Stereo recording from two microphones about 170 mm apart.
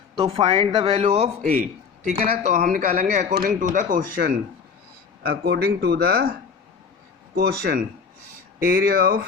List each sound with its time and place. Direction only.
0.2 s speech: 30° right (ahead or behind)
2.2 s speech: 55° right (ahead or behind)
3.1 s speech: 45° right (ahead or behind)
5.2 s speech: 70° right (ahead or behind)
7.3 s speech: 70° right (ahead or behind)